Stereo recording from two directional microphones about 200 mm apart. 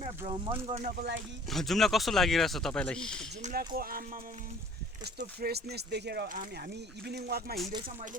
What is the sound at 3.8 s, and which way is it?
Speech, 45° right (ahead or behind).